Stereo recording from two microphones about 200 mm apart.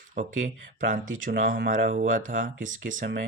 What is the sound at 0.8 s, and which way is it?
Speech, 40° right (ahead or behind).